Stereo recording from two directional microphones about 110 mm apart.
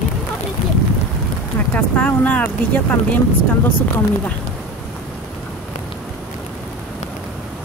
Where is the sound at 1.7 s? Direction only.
15° left (ahead or behind).